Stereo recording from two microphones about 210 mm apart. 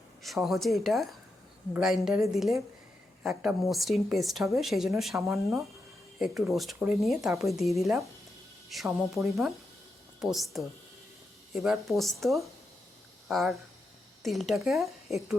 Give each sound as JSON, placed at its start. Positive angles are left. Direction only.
{"t": 0.2, "sound": "a woman's voice", "side_deg": 0}
{"t": 5.3, "sound": "speech", "side_deg": -15}
{"t": 6.1, "sound": "a woman's voice", "side_deg": 0}